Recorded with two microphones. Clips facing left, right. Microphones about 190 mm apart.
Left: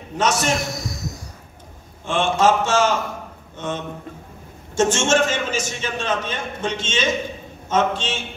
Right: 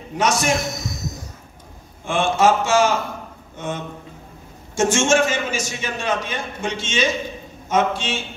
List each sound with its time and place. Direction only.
0.2 s a man's voice: 10° right (ahead or behind)
0.7 s a sound: 20° right (ahead or behind)
2.0 s a man's voice: 10° right (ahead or behind)